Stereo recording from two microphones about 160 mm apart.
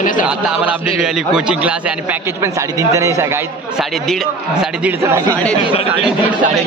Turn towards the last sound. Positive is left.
turn(degrees=-15)  # may be behind; listen again after turning